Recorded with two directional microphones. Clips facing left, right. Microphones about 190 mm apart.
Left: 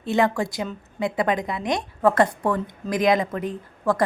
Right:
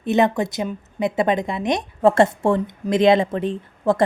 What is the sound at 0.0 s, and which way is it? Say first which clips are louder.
A woman's voice: right 3 dB; 20° right (ahead or behind).